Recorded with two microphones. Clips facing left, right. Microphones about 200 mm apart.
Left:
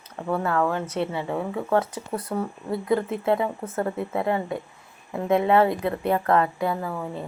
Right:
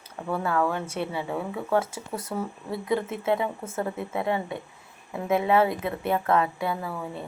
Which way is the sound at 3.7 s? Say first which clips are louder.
Left 3 dB; 40° left (ahead or behind).